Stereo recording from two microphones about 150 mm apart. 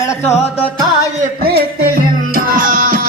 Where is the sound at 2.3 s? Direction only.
65° right (ahead or behind).